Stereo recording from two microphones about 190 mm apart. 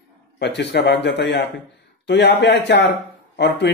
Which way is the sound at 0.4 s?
65° left (ahead or behind).